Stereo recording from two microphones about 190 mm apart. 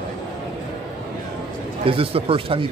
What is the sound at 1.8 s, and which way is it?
Speech, 30° right (ahead or behind).